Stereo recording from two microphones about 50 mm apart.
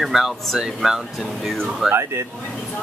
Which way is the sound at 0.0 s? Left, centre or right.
Centre.